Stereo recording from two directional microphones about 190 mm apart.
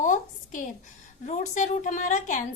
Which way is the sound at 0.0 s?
40° left (ahead or behind).